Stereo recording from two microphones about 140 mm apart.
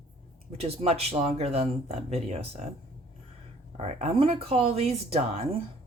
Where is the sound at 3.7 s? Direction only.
50° right (ahead or behind).